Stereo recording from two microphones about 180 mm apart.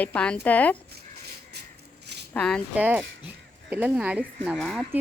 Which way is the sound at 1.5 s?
65° right (ahead or behind).